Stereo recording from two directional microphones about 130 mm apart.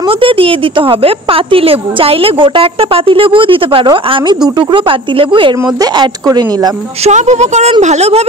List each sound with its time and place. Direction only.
0.2 s speech: 45° right (ahead or behind)
7.1 s a woman's voice: 60° right (ahead or behind)